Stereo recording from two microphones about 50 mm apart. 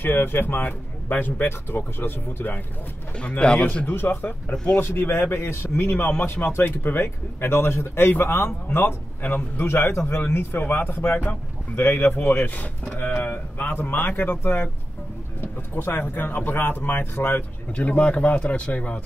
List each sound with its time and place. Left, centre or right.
0.0 s speech: left
2.0 s speech: left
3.2 s speech: left
3.8 s speech: left
5.3 s speech: left
9.7 s speech: left
13.3 s speech: left
17.7 s speech: left